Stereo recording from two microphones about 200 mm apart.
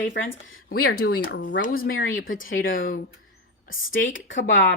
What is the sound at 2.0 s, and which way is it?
Speech, 80° left.